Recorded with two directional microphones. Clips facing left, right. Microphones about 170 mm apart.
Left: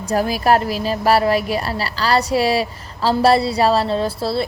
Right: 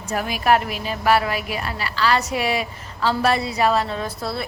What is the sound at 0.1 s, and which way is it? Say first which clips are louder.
A woman's voice: left 3 dB; 35° left (ahead or behind).